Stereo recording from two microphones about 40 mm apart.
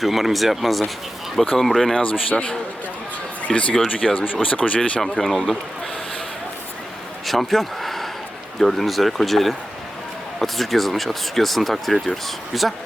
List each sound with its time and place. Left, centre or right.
0.0 s speech: centre
2.0 s speech: left
4.8 s speech: centre
7.3 s a sound: centre
8.5 s speech: centre